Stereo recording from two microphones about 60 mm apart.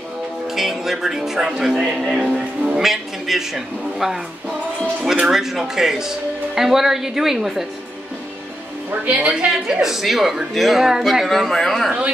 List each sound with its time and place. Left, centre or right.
0.5 s speech: centre
5.2 s a woman's voice: centre
9.0 s a woman's voice: right
9.3 s a woman's voice: centre